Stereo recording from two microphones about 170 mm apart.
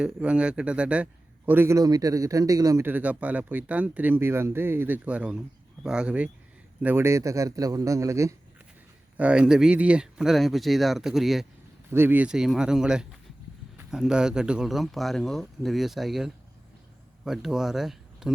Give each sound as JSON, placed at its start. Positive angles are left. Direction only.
{"t": 0.0, "sound": "a man's voice", "side_deg": -5}
{"t": 9.1, "sound": "speech", "side_deg": -5}
{"t": 11.9, "sound": "speech", "side_deg": -10}